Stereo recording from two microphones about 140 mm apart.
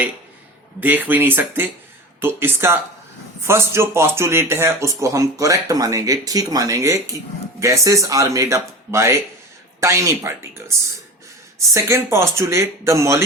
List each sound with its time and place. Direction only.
0.8 s speech: 10° right (ahead or behind)
11.7 s speech: 20° right (ahead or behind)